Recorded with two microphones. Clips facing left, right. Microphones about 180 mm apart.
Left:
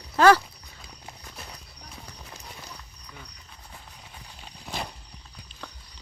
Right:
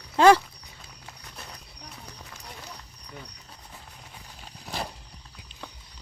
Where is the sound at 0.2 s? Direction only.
25° right (ahead or behind).